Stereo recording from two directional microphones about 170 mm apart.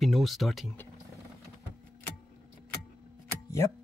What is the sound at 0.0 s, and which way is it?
Speech, centre (ahead or behind).